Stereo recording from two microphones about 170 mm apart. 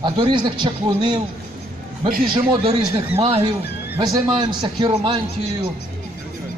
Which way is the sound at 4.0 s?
25° right (ahead or behind).